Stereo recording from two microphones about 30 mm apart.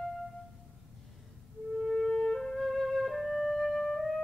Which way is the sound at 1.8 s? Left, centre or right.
Centre.